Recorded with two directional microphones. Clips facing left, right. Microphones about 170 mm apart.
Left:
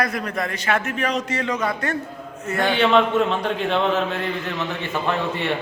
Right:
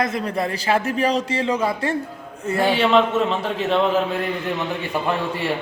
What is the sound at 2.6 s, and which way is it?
A man's voice, 5° right (ahead or behind).